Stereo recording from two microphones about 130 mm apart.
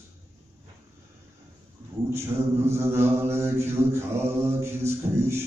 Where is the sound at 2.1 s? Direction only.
20° right (ahead or behind).